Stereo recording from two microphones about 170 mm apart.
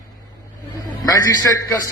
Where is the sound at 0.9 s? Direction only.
20° left (ahead or behind).